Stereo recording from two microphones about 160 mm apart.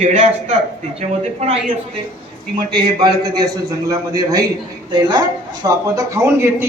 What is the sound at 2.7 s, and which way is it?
Speech, 30° right (ahead or behind).